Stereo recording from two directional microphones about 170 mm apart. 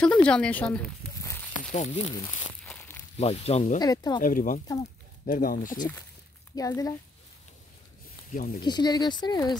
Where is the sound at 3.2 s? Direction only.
35° left (ahead or behind).